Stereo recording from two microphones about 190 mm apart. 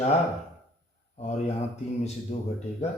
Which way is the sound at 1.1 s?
35° left (ahead or behind).